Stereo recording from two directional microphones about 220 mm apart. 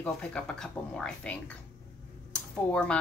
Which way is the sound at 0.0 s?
5° left (ahead or behind).